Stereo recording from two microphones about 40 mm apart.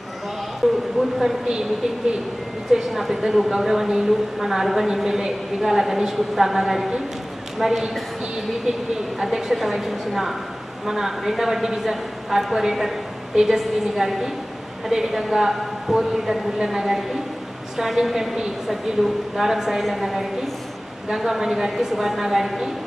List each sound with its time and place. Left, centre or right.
0.6 s a woman's voice: centre
1.5 s a woman's voice: centre
2.7 s a woman's voice: centre
9.2 s a woman's voice: centre